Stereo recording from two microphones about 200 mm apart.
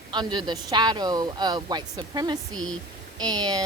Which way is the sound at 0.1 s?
20° right (ahead or behind).